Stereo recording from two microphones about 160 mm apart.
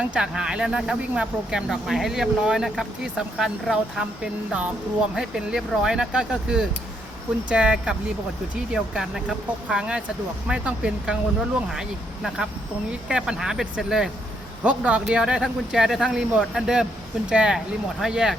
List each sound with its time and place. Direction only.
0.0 s speech: 5° right (ahead or behind)